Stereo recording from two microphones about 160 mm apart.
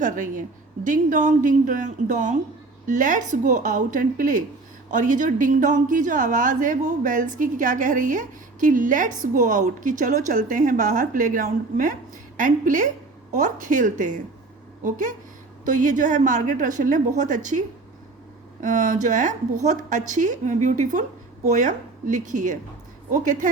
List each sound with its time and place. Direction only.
0.0 s a woman's voice: 55° right (ahead or behind)
18.6 s a woman's voice: 50° right (ahead or behind)